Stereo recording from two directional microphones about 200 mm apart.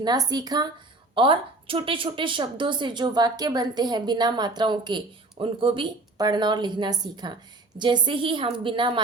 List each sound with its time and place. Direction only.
0.0 s a woman's voice: 20° right (ahead or behind)